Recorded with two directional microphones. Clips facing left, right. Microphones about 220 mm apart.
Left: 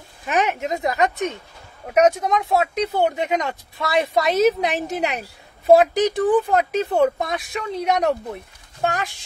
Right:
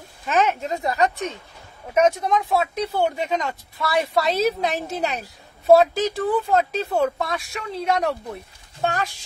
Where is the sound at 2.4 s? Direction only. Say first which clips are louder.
Left 2 dB; 20° left (ahead or behind).